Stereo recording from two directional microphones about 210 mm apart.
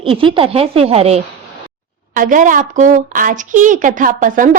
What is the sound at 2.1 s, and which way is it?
A woman's voice, 40° right (ahead or behind).